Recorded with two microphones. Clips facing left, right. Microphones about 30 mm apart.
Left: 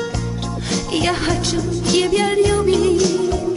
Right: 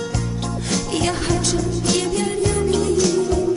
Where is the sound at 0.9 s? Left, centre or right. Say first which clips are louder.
Left 4 dB; centre.